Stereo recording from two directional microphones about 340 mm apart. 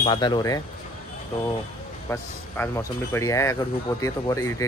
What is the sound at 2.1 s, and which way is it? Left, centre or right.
Speech, centre.